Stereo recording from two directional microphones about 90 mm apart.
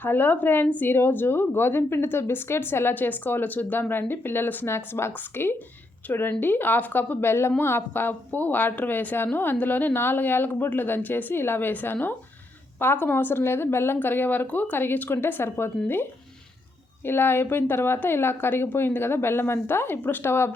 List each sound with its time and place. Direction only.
0.0 s a woman's voice: 20° left (ahead or behind)
17.1 s a woman's voice: 25° left (ahead or behind)